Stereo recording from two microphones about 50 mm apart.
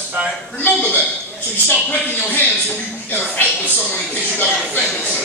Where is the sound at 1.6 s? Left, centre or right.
Left.